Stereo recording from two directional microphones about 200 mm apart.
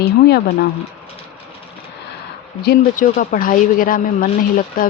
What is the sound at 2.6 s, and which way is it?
Speech, 45° left (ahead or behind).